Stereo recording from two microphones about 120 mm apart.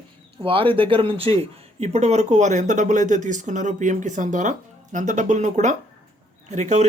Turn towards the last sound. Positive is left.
turn(degrees=-70)  # may be behind; listen again after turning